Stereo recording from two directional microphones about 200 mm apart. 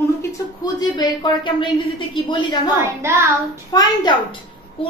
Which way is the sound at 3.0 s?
15° right (ahead or behind).